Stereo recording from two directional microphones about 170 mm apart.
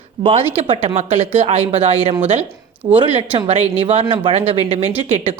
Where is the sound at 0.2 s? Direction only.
35° right (ahead or behind).